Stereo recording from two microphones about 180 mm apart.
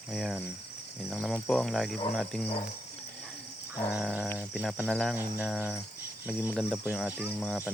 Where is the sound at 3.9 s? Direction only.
5° right (ahead or behind).